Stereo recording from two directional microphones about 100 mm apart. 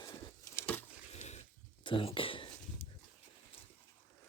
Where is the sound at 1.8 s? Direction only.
60° left (ahead or behind).